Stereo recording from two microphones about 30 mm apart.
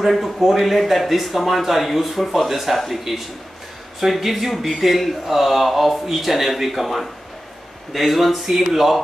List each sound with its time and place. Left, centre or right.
0.4 s speech: centre